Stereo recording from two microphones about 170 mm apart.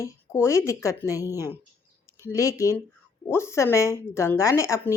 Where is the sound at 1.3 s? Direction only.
15° right (ahead or behind).